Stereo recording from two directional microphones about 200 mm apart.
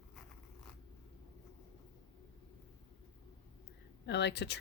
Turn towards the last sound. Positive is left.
turn(degrees=60)  # may be behind; listen again after turning